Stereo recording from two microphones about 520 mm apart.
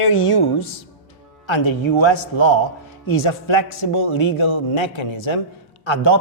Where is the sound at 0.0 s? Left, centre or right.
Left.